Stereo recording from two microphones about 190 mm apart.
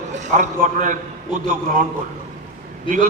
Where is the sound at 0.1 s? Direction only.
40° right (ahead or behind).